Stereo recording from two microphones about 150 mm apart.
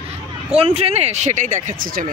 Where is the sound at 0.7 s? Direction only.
45° right (ahead or behind); by 2.1 s 70° right (ahead or behind).